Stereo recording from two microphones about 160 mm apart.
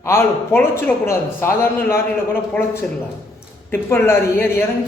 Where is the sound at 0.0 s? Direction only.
15° left (ahead or behind).